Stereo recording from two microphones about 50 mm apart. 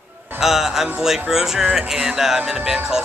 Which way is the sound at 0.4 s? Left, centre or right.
Centre.